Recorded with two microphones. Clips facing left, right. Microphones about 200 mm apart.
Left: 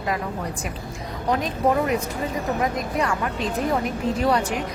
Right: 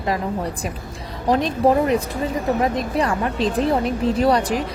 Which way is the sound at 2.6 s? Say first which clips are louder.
Right 3 dB; 35° right (ahead or behind).